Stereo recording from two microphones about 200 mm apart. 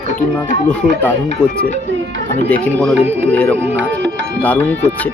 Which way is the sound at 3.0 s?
10° right (ahead or behind).